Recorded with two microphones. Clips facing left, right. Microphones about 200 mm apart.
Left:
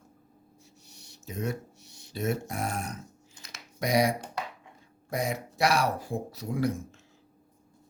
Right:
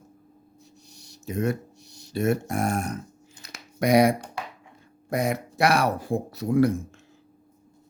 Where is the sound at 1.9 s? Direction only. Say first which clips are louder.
Right 5 dB; 60° left (ahead or behind).